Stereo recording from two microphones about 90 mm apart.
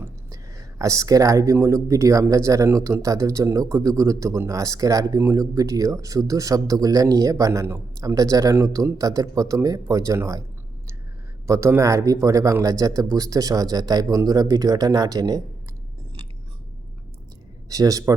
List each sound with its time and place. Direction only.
0.3 s a sound: 40° right (ahead or behind)
1.5 s speech: 35° right (ahead or behind)
11.4 s speech: 35° right (ahead or behind)
17.7 s speech: 40° right (ahead or behind)